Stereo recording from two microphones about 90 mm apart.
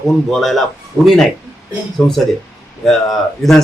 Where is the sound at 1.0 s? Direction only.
20° left (ahead or behind); by 3.6 s 5° left (ahead or behind).